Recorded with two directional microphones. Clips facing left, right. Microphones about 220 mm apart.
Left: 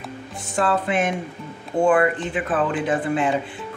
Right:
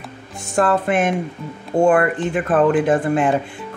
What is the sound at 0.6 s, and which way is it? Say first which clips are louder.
Speech: right 4 dB; 50° right (ahead or behind).